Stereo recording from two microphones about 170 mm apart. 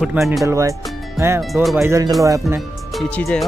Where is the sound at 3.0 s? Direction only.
Centre (ahead or behind).